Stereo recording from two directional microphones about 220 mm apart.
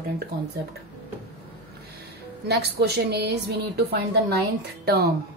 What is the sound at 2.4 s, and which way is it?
A woman's voice, 50° right (ahead or behind).